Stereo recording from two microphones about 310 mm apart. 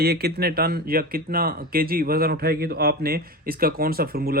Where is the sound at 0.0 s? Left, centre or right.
Right.